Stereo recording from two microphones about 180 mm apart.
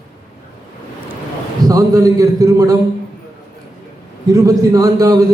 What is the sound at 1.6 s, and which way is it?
A man's voice, 20° right (ahead or behind).